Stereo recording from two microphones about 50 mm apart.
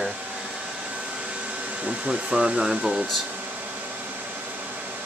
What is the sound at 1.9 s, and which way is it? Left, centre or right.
Speech, centre.